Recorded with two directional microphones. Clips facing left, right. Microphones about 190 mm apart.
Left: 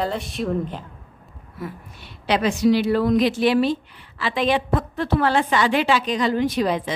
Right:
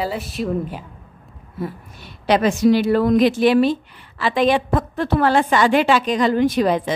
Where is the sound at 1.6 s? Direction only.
25° right (ahead or behind).